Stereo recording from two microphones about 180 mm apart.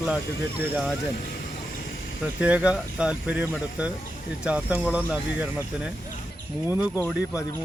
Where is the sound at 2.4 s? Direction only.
5° right (ahead or behind).